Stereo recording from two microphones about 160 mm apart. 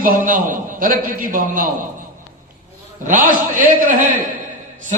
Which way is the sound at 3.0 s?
55° right (ahead or behind).